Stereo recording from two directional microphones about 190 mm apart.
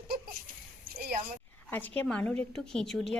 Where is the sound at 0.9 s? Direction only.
50° right (ahead or behind).